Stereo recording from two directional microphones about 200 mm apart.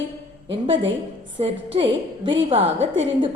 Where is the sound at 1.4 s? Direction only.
30° right (ahead or behind).